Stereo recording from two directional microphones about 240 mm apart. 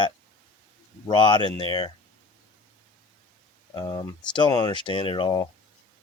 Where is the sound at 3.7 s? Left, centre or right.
Centre.